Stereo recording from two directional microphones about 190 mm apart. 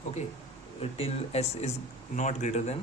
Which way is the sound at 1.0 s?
35° left (ahead or behind).